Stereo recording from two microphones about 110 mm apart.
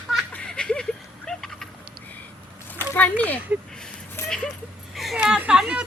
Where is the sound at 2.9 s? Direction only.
15° left (ahead or behind).